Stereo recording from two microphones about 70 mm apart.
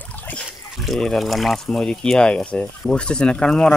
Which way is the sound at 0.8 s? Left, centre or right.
Centre.